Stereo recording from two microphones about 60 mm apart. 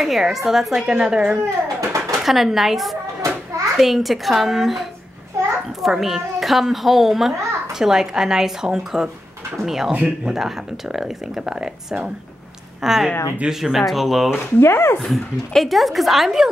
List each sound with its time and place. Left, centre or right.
0.0 s speech: centre
1.8 s pigeon: right
2.2 s a woman's voice: centre
3.2 s children playing: right
3.8 s a woman's voice: centre
14.6 s speech: left
15.0 s a woman's voice: centre